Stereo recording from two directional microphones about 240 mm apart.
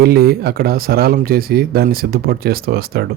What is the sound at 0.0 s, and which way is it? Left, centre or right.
Speech, right.